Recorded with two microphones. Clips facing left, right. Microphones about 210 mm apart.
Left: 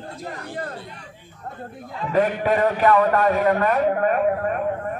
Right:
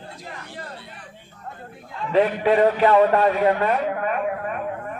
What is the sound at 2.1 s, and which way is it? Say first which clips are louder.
Speech: right 2 dB; 45° left (ahead or behind).